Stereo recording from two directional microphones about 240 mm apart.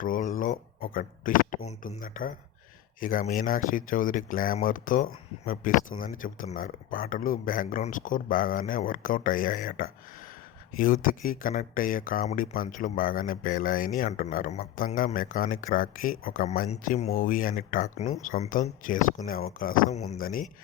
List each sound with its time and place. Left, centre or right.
0.0 s speech: left